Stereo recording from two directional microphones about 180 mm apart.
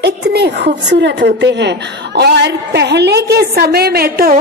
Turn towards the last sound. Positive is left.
turn(degrees=-55)  # may be behind; listen again after turning